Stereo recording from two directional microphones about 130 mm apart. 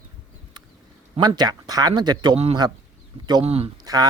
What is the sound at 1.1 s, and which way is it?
Speech, 30° right (ahead or behind).